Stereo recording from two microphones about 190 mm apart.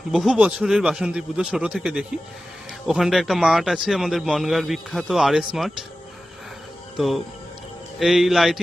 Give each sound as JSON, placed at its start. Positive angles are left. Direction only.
{"t": 0.1, "sound": "a man's voice", "side_deg": 0}
{"t": 6.9, "sound": "a man's voice", "side_deg": 0}